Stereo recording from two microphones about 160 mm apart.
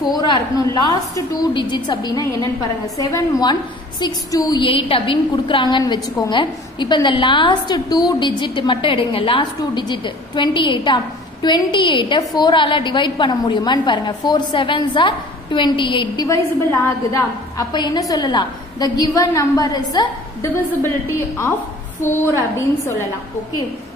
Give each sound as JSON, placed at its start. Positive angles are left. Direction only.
{"t": 0.1, "sound": "a woman's voice", "side_deg": 25}
{"t": 16.3, "sound": "a woman's voice", "side_deg": 20}
{"t": 22.0, "sound": "a woman's voice", "side_deg": 15}